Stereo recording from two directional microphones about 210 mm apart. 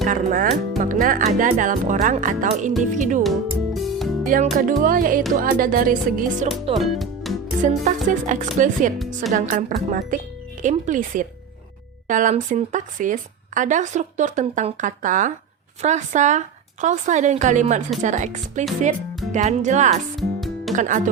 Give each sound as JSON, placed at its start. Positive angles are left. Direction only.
{"t": 0.0, "sound": "speech", "side_deg": -40}
{"t": 3.2, "sound": "music", "side_deg": 0}
{"t": 4.3, "sound": "speech", "side_deg": -40}
{"t": 6.7, "sound": "music", "side_deg": 0}
{"t": 7.6, "sound": "speech", "side_deg": -35}
{"t": 20.1, "sound": "music", "side_deg": 0}
{"t": 20.7, "sound": "speech", "side_deg": -35}